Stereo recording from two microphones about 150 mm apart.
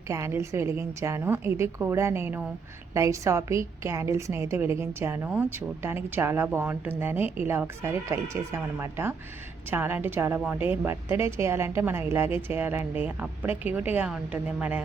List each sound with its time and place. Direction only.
0.1 s a woman's voice: 20° right (ahead or behind)